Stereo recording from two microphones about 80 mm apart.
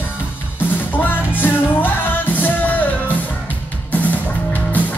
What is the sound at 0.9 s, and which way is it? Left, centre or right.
Music, left.